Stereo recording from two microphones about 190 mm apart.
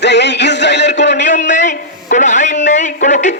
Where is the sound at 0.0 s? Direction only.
65° left (ahead or behind).